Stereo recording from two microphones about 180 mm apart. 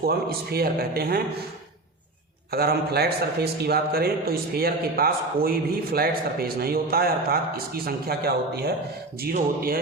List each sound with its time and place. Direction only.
0.0 s a man's voice: 60° right (ahead or behind)
2.5 s a man's voice: 60° right (ahead or behind)